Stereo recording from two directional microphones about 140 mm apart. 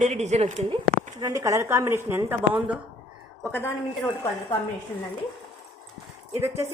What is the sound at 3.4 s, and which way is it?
Speech, 10° left (ahead or behind).